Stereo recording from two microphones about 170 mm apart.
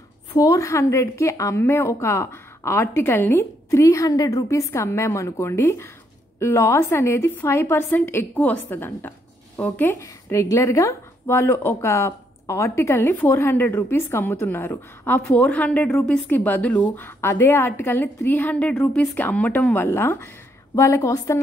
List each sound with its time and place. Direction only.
0.4 s a woman's voice: 20° left (ahead or behind)